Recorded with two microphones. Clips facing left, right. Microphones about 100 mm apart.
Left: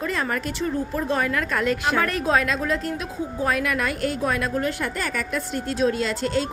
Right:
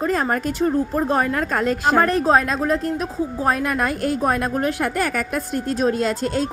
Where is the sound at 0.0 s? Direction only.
40° right (ahead or behind).